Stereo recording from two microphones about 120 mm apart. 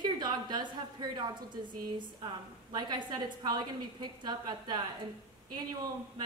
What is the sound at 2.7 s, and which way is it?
A woman's voice, 35° right (ahead or behind).